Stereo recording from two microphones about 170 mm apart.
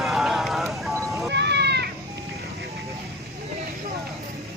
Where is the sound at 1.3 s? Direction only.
85° right.